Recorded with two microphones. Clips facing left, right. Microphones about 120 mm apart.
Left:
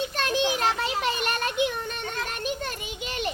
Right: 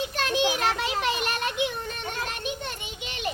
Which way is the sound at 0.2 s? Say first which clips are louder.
Even; 35° left (ahead or behind).